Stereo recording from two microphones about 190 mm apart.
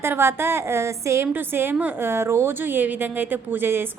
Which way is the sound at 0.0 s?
15° right (ahead or behind).